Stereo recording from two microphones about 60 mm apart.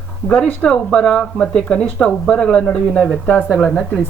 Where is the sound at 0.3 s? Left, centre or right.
Left.